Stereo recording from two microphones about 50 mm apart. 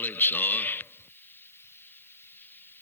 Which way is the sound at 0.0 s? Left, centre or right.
Left.